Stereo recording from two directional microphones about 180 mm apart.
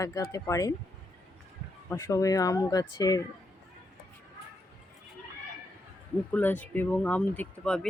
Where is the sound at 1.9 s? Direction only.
20° left (ahead or behind).